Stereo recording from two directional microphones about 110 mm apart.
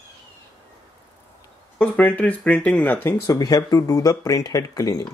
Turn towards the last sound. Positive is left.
turn(degrees=35)  # may be behind; listen again after turning